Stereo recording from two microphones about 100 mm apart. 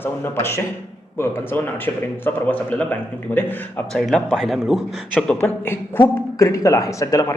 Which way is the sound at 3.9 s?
Centre (ahead or behind).